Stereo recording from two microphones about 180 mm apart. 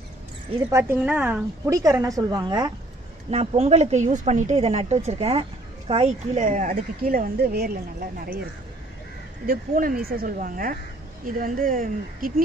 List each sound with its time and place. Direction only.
0.7 s a woman's voice: 15° right (ahead or behind)
3.3 s a woman's voice: 35° right (ahead or behind); by 8.4 s 60° right (ahead or behind)
9.5 s speech: 50° right (ahead or behind)